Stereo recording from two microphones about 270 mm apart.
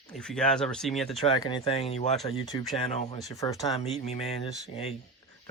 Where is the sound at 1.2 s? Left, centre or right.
Centre.